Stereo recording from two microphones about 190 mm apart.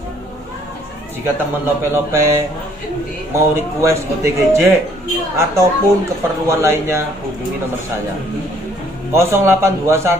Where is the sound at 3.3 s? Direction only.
15° right (ahead or behind).